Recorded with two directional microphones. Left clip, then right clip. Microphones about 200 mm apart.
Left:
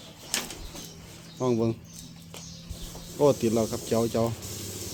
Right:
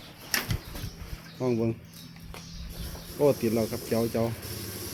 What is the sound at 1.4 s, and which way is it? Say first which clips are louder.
Speech: left 2 dB; 10° left (ahead or behind).